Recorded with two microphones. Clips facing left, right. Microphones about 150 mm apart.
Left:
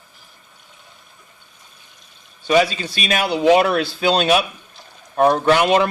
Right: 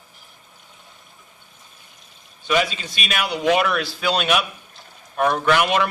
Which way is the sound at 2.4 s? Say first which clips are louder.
Left 5 dB; 35° left (ahead or behind).